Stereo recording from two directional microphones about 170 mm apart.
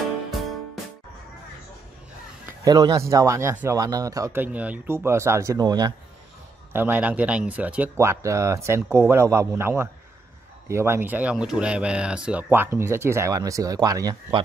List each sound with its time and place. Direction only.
0.3 s music: centre (ahead or behind)
2.4 s speech: 20° right (ahead or behind)
6.7 s speech: 10° right (ahead or behind)